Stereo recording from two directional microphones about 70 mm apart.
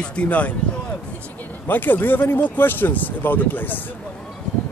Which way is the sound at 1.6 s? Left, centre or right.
Left.